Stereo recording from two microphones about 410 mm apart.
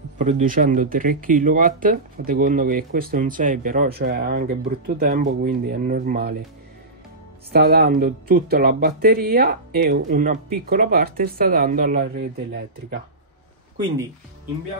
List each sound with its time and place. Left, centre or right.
0.2 s speech: centre
7.5 s speech: right